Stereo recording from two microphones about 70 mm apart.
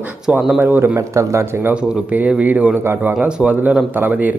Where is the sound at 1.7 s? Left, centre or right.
Right.